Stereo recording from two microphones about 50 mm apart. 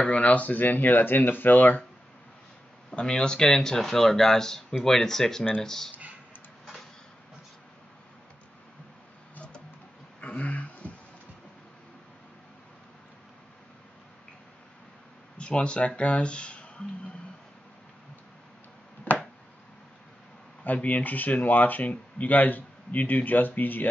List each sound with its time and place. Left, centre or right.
0.0 s speech: left
2.9 s speech: centre
10.2 s a sound: left
15.3 s speech: left
19.1 s finger snapping: left
20.6 s speech: left